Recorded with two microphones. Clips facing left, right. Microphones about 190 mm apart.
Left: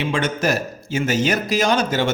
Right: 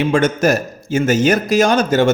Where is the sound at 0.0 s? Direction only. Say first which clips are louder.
Right 7 dB; 45° right (ahead or behind).